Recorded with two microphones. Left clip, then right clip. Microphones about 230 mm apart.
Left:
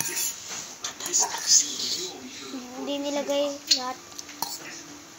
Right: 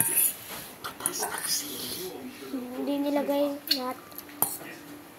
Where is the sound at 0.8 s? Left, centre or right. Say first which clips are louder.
Left 6 dB; right.